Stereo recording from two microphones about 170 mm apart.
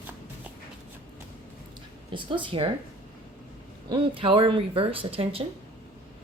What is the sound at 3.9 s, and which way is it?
Speech, 30° right (ahead or behind).